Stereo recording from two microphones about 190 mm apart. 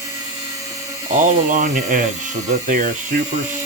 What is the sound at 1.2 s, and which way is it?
Speech, 40° right (ahead or behind).